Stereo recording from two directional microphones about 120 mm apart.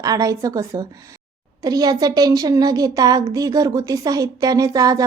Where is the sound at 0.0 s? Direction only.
30° right (ahead or behind).